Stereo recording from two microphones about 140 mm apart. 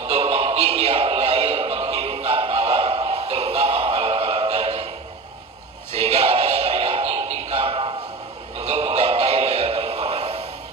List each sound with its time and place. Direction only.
0.0 s music: 45° right (ahead or behind)
6.0 s music: 45° right (ahead or behind)